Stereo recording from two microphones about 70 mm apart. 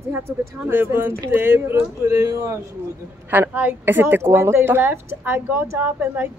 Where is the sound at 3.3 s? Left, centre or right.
Right.